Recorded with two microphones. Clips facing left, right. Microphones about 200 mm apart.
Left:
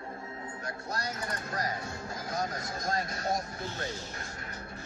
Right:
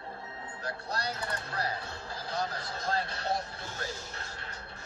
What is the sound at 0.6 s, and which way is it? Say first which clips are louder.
Music: right 2 dB; 30° right (ahead or behind).